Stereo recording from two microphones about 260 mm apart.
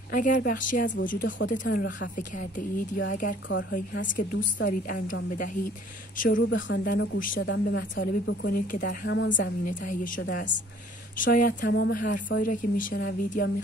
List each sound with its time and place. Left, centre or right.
0.1 s speech: left
6.3 s speech: left
10.2 s speech: left
11.1 s speech: left